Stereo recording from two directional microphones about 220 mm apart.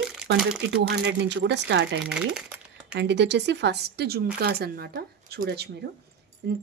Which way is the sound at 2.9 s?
50° right (ahead or behind).